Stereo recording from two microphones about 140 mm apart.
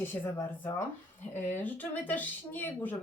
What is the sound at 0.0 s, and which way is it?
Speech, 15° left (ahead or behind).